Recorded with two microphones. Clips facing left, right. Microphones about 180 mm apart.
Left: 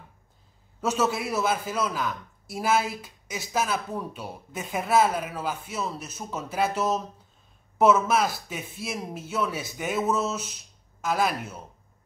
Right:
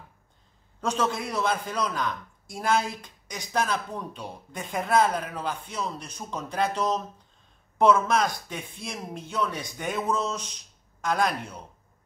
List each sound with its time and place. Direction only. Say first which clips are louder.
0.7 s a man's voice: left 2 dB; 5° left (ahead or behind)